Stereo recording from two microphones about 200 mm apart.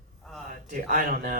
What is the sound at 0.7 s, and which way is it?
Speech, 45° right (ahead or behind).